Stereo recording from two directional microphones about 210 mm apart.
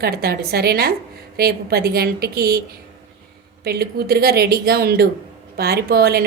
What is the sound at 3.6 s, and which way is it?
Speech, 50° right (ahead or behind).